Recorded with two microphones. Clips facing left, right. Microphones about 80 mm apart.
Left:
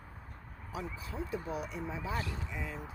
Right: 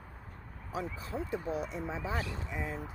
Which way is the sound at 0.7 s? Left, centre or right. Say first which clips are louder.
Right 4 dB; right.